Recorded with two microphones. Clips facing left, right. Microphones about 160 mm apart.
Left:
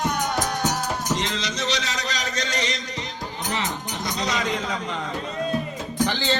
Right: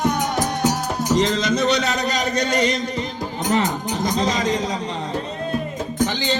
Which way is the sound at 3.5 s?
45° right (ahead or behind).